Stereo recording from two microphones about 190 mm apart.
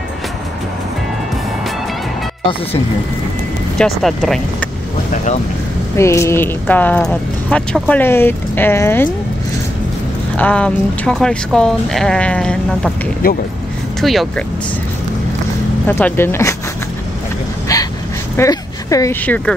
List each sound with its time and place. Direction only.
4.0 s speech: centre (ahead or behind)
5.9 s speech: 15° left (ahead or behind)
10.3 s speech: 5° left (ahead or behind)
13.2 s speech: 50° left (ahead or behind)
14.0 s speech: centre (ahead or behind)
15.9 s speech: 10° left (ahead or behind)
18.3 s speech: 15° left (ahead or behind)